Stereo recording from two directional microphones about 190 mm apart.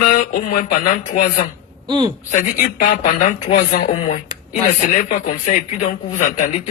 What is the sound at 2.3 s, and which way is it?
Speech, 45° left (ahead or behind).